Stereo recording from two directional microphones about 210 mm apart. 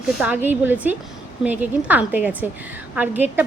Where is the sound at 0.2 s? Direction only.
10° right (ahead or behind).